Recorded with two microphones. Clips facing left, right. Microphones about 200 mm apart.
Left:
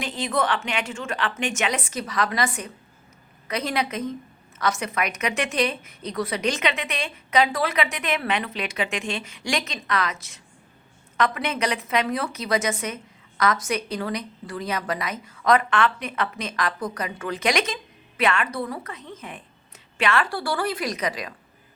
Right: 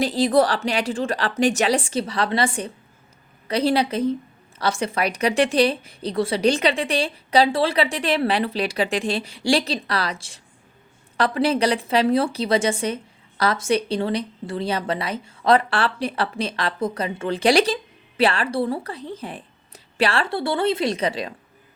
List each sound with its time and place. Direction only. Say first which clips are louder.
0.0 s a woman's voice: right 8 dB; 35° right (ahead or behind)